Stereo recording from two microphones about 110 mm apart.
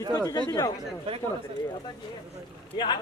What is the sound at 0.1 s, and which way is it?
Speech, 35° left (ahead or behind).